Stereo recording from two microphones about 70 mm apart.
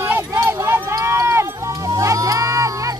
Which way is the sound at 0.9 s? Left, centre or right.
Right.